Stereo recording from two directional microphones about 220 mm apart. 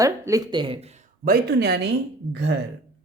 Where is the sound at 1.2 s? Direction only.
45° right (ahead or behind).